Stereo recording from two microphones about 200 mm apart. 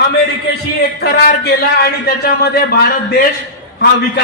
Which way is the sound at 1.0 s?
55° left (ahead or behind).